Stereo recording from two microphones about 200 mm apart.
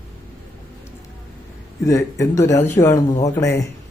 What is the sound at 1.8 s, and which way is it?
Speech, 15° left (ahead or behind).